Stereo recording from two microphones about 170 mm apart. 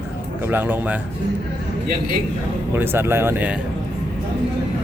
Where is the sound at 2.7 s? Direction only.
15° right (ahead or behind).